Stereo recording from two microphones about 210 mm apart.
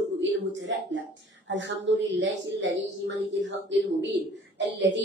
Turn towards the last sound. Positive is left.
turn(degrees=-60)  # may be behind; listen again after turning